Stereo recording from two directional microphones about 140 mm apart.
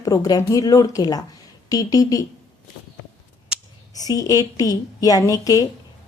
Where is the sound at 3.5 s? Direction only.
5° right (ahead or behind).